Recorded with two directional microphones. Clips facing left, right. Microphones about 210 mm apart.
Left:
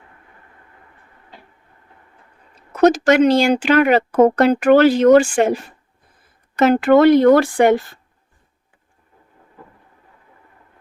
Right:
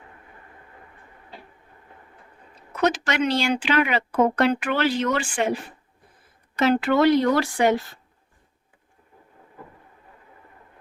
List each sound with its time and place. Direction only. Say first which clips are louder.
2.8 s speech: left 10 dB; 45° left (ahead or behind)
6.6 s speech: left 7 dB; 50° left (ahead or behind)